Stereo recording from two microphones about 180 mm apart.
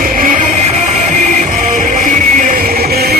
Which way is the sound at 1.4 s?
45° right (ahead or behind).